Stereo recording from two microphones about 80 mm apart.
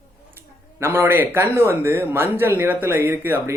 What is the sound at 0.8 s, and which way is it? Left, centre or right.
Speech, right.